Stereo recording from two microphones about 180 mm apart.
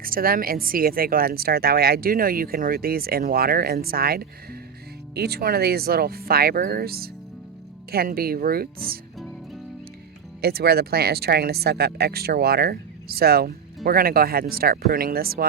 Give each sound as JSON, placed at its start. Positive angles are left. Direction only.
{"t": 0.0, "sound": "speech", "side_deg": -55}
{"t": 10.4, "sound": "speech", "side_deg": -60}